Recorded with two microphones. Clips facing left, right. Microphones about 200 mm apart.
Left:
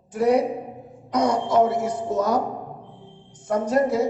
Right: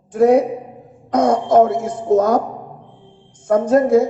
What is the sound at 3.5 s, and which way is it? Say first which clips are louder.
Speech: right 8 dB; 50° right (ahead or behind).